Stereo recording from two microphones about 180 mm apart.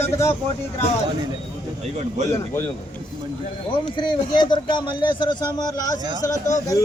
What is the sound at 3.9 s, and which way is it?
A man's voice, 25° left (ahead or behind).